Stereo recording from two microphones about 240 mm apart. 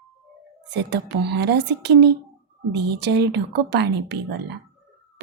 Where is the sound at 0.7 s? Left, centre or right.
Right.